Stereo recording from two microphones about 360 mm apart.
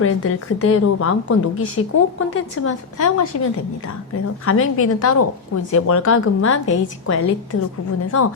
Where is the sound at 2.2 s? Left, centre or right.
Left.